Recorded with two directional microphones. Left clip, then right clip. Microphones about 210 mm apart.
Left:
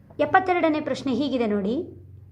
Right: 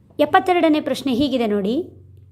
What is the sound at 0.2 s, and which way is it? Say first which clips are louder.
A woman's voice: right 4 dB; 35° right (ahead or behind).